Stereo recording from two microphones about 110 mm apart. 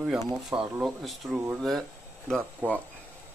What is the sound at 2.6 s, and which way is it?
Speech, 15° right (ahead or behind).